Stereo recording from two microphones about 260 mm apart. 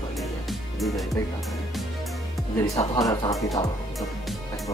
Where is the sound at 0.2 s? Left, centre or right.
Centre.